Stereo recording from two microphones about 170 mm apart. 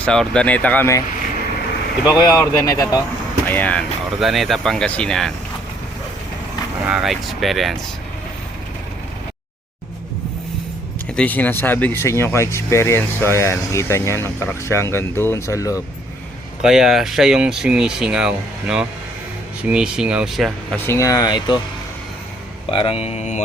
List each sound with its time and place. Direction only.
0.0 s speech: 5° left (ahead or behind)
2.0 s speech: 25° left (ahead or behind); by 5.3 s 5° left (ahead or behind)
6.8 s speech: 5° right (ahead or behind)
11.2 s speech: 10° left (ahead or behind)
16.6 s speech: 5° right (ahead or behind)
20.7 s speech: 15° left (ahead or behind)
22.7 s speech: 30° left (ahead or behind)